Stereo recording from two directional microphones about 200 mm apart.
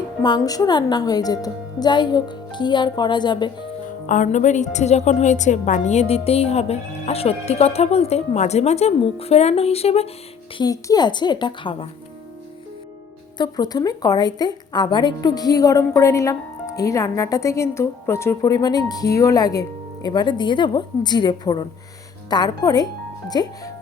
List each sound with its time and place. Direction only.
0.2 s a woman's voice: 20° left (ahead or behind)
4.0 s a woman's voice: 40° left (ahead or behind)
10.6 s a woman's voice: 20° left (ahead or behind)
13.4 s a woman's voice: 20° left (ahead or behind)